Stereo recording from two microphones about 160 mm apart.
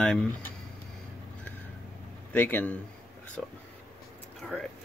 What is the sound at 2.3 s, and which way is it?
Speech, 10° left (ahead or behind).